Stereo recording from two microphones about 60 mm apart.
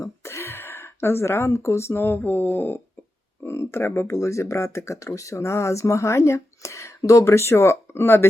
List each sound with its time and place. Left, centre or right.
0.0 s speech: left
3.4 s a sound: left
4.0 s speech: left